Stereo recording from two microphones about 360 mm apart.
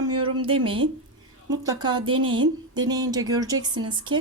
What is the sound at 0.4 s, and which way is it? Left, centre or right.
Speech, centre.